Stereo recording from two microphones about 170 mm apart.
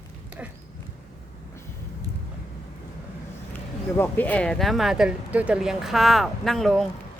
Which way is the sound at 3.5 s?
10° left (ahead or behind).